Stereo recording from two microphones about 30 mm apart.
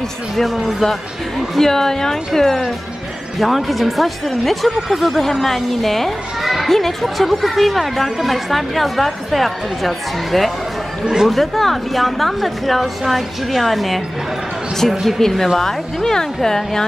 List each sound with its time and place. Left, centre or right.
0.4 s speech: centre
1.6 s a woman's voice: centre
3.3 s speech: centre
5.1 s a woman's voice: centre
6.4 s children playing: centre
6.7 s speech: centre
15.1 s a woman's voice: centre